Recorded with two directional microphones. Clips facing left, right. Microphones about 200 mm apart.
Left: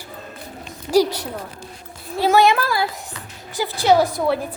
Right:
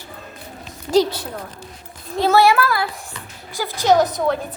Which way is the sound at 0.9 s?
10° left (ahead or behind).